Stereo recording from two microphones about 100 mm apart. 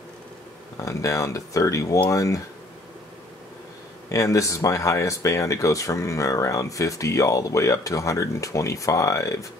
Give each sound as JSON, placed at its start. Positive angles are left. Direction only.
{"t": 0.7, "sound": "speech", "side_deg": 35}
{"t": 4.1, "sound": "speech", "side_deg": 35}